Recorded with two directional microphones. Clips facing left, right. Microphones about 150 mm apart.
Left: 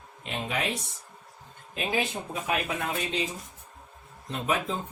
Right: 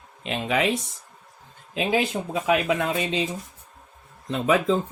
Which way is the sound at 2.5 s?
90° right.